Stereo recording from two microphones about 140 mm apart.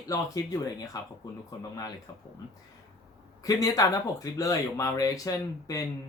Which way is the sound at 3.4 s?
25° left (ahead or behind).